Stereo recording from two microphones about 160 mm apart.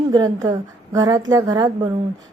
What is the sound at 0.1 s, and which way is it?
A woman's voice, 25° right (ahead or behind).